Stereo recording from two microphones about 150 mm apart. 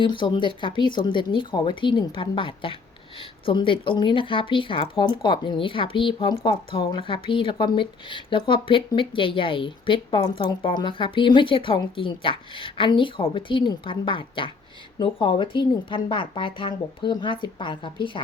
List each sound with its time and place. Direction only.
0.0 s speech: 30° left (ahead or behind)